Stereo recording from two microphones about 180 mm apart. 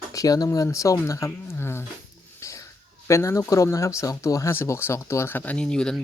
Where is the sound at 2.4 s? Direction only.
15° left (ahead or behind).